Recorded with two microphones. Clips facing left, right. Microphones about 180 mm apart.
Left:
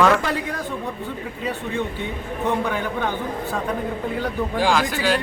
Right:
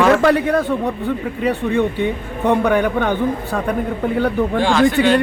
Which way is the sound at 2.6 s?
65° right (ahead or behind).